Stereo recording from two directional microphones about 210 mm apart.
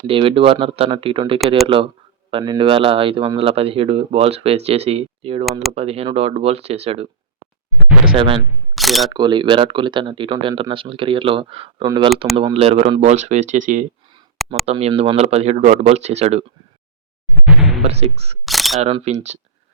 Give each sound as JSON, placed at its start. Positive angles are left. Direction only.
{"t": 0.1, "sound": "speech", "side_deg": -25}
{"t": 8.1, "sound": "speech", "side_deg": -25}
{"t": 8.7, "sound": "single-lens reflex camera", "side_deg": 0}
{"t": 9.1, "sound": "speech", "side_deg": -20}
{"t": 14.3, "sound": "a sound", "side_deg": 0}
{"t": 14.7, "sound": "speech", "side_deg": -30}
{"t": 17.4, "sound": "speech", "side_deg": 0}
{"t": 17.8, "sound": "speech", "side_deg": -30}
{"t": 18.4, "sound": "single-lens reflex camera", "side_deg": 0}
{"t": 18.8, "sound": "speech", "side_deg": -30}